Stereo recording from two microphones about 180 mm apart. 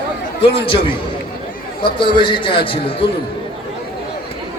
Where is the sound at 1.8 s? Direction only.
25° left (ahead or behind).